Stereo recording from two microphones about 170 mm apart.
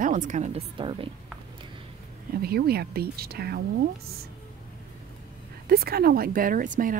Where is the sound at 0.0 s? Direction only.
45° right (ahead or behind); by 1.0 s 30° right (ahead or behind).